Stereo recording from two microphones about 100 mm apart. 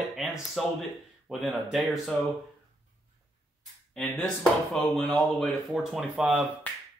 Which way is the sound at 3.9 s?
5° left (ahead or behind).